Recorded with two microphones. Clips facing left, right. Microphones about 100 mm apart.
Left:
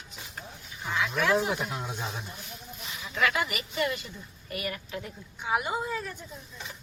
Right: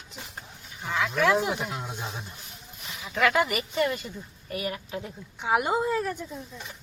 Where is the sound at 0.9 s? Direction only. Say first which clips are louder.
Right 2 dB; 60° right (ahead or behind).